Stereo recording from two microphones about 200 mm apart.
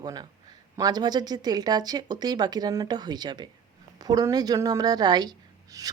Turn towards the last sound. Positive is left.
turn(degrees=-15)  # may be behind; listen again after turning